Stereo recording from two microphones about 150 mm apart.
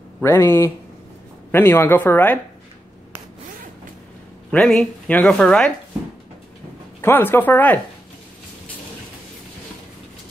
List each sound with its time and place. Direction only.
0.2 s a woman's voice: 15° left (ahead or behind)
4.5 s a woman's voice: 5° left (ahead or behind)
7.0 s a woman's voice: 15° left (ahead or behind)